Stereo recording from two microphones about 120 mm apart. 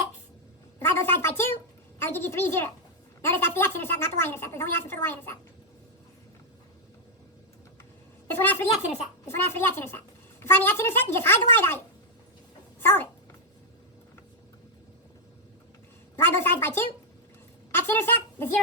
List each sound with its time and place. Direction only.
0.8 s a woman's voice: 20° left (ahead or behind)
8.3 s a woman's voice: 15° left (ahead or behind)
12.8 s cat: 20° left (ahead or behind)
16.1 s a woman's voice: 20° left (ahead or behind)
17.7 s a sound: 20° left (ahead or behind)